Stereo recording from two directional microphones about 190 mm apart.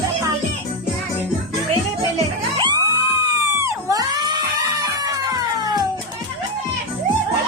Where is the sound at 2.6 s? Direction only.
20° right (ahead or behind).